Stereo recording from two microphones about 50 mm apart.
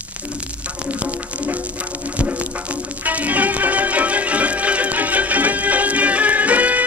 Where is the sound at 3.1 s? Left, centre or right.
Right.